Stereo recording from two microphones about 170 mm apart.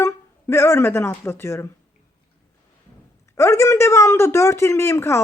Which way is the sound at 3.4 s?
15° left (ahead or behind).